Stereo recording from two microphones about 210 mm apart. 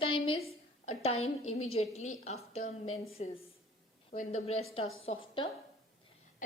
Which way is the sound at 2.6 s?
75° left (ahead or behind).